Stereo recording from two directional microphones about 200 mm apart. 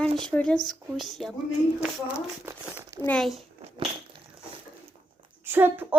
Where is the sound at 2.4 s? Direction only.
10° right (ahead or behind).